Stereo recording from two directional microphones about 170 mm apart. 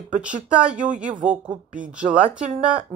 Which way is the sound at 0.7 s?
45° right (ahead or behind).